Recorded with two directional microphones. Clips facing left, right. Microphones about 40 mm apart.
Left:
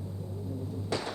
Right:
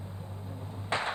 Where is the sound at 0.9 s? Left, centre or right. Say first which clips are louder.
Right 3 dB; right.